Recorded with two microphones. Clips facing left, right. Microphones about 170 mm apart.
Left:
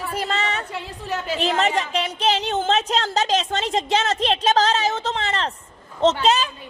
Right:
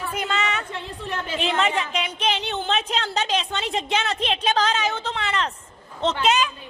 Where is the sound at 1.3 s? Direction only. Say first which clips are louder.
Left 2 dB; 40° left (ahead or behind).